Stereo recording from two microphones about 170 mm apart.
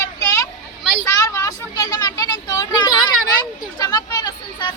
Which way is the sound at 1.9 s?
20° left (ahead or behind).